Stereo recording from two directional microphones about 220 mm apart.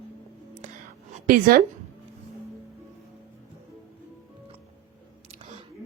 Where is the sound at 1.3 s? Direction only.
40° right (ahead or behind).